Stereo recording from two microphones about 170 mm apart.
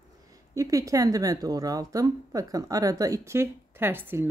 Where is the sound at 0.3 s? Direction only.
20° right (ahead or behind).